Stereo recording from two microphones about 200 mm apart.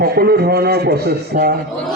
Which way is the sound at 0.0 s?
50° right (ahead or behind).